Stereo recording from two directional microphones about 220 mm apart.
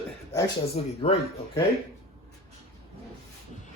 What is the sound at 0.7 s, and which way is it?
Speech, 30° left (ahead or behind).